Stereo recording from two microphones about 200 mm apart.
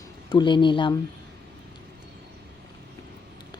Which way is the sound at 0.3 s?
25° left (ahead or behind).